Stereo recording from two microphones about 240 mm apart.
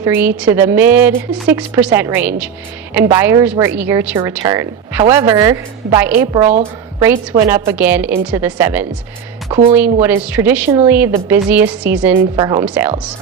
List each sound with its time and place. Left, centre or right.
0.0 s a woman's voice: centre
12.4 s speech: centre
12.6 s speech: centre